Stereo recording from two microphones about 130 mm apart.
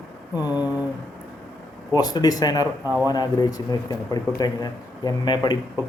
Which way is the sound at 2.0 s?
30° left (ahead or behind).